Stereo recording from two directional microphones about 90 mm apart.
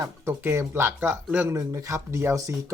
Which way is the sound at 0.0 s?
30° right (ahead or behind).